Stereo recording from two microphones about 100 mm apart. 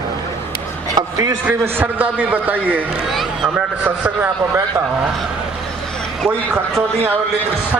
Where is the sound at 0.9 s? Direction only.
35° right (ahead or behind).